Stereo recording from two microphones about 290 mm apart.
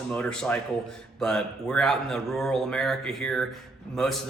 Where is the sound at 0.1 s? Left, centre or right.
Centre.